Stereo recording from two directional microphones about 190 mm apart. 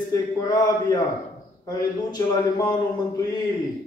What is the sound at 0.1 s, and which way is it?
A man's voice, 20° left (ahead or behind).